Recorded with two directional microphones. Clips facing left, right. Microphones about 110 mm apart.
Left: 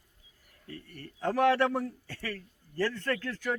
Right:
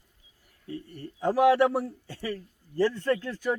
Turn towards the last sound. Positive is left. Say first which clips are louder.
# right 5 dB
turn(degrees=-15)  # may be behind; listen again after turning